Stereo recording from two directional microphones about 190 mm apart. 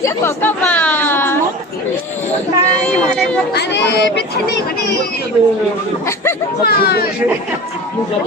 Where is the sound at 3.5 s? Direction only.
60° left (ahead or behind).